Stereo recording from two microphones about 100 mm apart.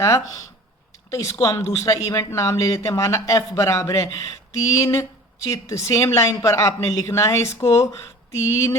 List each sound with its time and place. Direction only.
1.1 s speech: 30° left (ahead or behind)